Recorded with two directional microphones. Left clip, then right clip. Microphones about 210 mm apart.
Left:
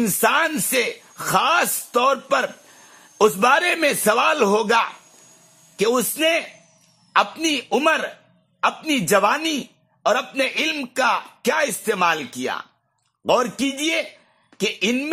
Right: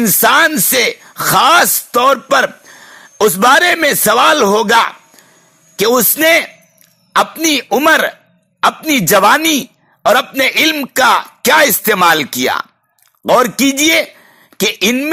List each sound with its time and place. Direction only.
0.0 s a man's voice: 25° right (ahead or behind)